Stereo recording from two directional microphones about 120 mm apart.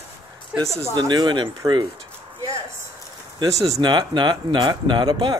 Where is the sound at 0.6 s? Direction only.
25° right (ahead or behind).